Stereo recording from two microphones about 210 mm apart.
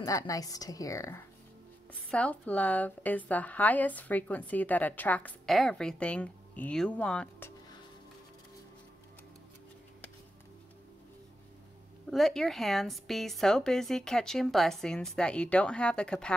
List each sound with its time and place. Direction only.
0.0 s a woman's voice: 15° left (ahead or behind)
12.1 s speech: centre (ahead or behind)